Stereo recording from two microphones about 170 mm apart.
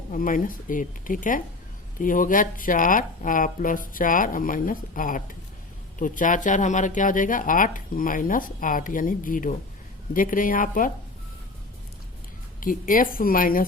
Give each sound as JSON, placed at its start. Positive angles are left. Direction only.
{"t": 0.1, "sound": "speech", "side_deg": 50}
{"t": 12.5, "sound": "a woman's voice", "side_deg": 55}